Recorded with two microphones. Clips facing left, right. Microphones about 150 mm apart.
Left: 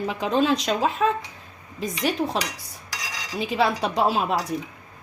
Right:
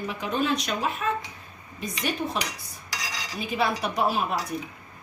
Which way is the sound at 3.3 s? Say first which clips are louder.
Left 4 dB; 90° left.